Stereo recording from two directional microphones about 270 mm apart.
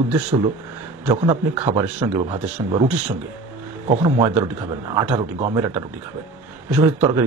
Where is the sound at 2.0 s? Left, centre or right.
Centre.